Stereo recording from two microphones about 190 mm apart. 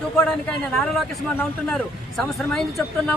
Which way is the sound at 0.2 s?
5° left (ahead or behind).